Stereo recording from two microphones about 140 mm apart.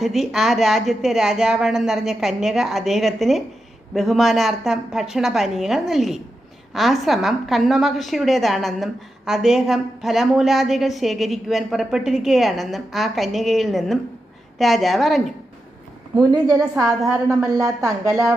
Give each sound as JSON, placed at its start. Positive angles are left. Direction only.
{"t": 0.0, "sound": "a woman's voice", "side_deg": 0}
{"t": 16.5, "sound": "a woman's voice", "side_deg": 0}
{"t": 17.2, "sound": "speech", "side_deg": -20}